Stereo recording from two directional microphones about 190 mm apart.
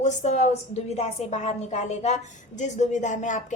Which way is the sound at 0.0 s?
40° left (ahead or behind).